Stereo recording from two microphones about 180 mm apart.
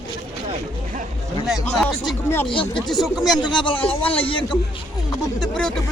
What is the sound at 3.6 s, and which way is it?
Speech, 30° left (ahead or behind).